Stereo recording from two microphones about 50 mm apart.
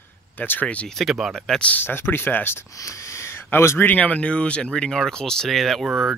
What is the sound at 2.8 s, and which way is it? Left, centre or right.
Wheeze, left.